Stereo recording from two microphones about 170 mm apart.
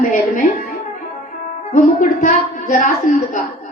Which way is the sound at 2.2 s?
50° left (ahead or behind).